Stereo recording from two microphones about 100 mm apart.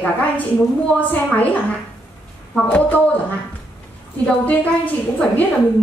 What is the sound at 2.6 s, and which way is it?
Speech, 15° left (ahead or behind).